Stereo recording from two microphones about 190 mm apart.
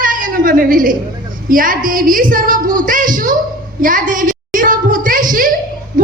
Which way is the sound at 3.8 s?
45° right (ahead or behind).